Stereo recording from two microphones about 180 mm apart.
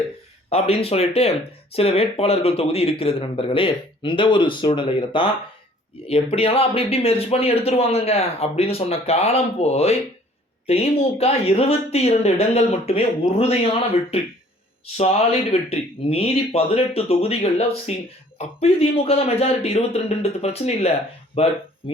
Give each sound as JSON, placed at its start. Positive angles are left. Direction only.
{"t": 0.5, "sound": "a man's voice", "side_deg": 35}